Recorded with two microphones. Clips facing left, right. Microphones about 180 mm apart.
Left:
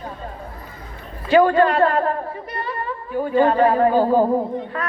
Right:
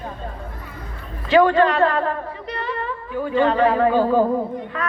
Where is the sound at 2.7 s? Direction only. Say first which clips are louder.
Left 1 dB; 40° left (ahead or behind).